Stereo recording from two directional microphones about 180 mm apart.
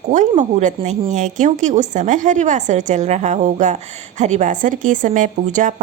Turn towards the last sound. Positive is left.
turn(degrees=-45)  # may be behind; listen again after turning